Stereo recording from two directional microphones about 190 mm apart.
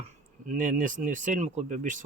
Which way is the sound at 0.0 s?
45° right (ahead or behind).